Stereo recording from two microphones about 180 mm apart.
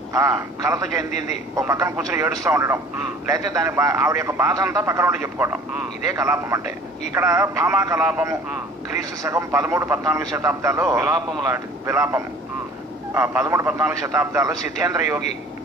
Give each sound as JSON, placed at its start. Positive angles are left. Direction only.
{"t": 0.1, "sound": "a man's voice", "side_deg": -15}
{"t": 1.1, "sound": "a man's voice", "side_deg": 40}
{"t": 1.7, "sound": "a man's voice", "side_deg": -15}